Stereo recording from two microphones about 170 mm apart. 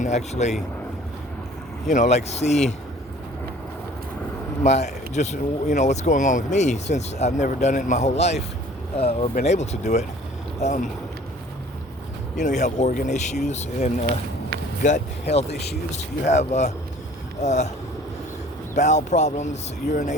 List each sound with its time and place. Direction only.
0.0 s speech: 40° left (ahead or behind)
1.9 s speech: 45° left (ahead or behind)
4.6 s speech: 40° left (ahead or behind)
12.4 s speech: 45° left (ahead or behind)
15.4 s speech: 75° left (ahead or behind)
16.2 s speech: 45° left (ahead or behind)
18.7 s speech: 45° left (ahead or behind)